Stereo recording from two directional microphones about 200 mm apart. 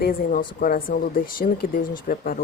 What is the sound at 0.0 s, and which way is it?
Speech, 45° left (ahead or behind).